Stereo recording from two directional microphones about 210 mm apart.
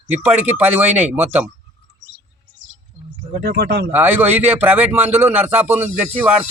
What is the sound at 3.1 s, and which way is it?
Speech, 45° right (ahead or behind).